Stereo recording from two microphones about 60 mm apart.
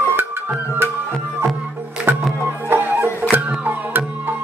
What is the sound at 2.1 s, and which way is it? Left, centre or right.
Music, right.